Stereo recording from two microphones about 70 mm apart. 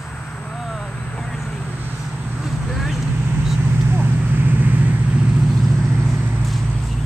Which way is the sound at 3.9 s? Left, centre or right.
Right.